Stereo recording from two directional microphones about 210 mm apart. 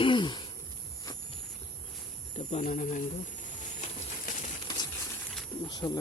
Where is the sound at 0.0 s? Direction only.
20° left (ahead or behind).